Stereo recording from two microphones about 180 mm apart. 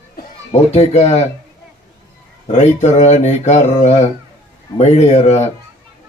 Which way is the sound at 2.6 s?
40° left (ahead or behind).